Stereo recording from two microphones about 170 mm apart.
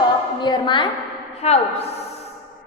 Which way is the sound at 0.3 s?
25° left (ahead or behind).